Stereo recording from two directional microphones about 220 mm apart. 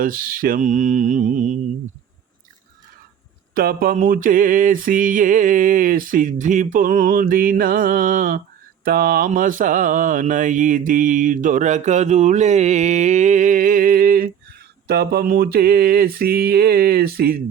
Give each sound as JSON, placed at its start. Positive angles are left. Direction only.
{"t": 0.0, "sound": "mantra", "side_deg": -40}
{"t": 3.5, "sound": "mantra", "side_deg": -40}